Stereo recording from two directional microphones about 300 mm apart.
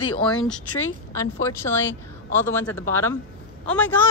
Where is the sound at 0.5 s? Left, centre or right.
Centre.